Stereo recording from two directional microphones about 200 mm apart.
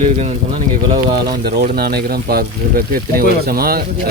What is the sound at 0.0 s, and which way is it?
Speech, 35° right (ahead or behind).